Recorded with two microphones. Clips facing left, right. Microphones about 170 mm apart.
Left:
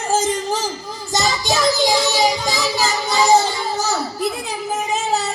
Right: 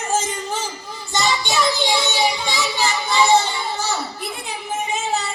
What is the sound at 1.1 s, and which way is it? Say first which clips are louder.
Child singing: left 2 dB; 40° left (ahead or behind).